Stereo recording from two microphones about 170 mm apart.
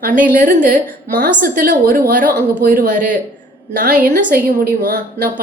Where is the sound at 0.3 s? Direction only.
50° right (ahead or behind).